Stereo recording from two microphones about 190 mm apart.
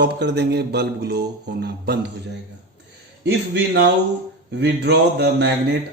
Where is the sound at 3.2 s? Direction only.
60° right (ahead or behind).